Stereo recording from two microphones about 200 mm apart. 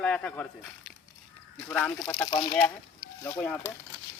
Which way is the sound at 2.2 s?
20° left (ahead or behind).